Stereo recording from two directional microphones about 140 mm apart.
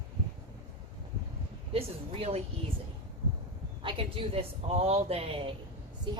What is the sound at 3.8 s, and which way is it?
A woman's voice, 40° right (ahead or behind).